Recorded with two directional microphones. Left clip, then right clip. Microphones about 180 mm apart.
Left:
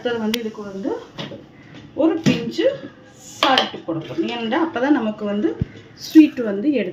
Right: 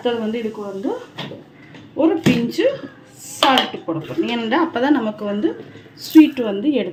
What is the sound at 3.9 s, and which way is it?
Speech, 15° right (ahead or behind).